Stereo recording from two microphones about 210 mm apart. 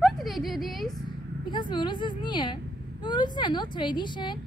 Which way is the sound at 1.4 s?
20° left (ahead or behind).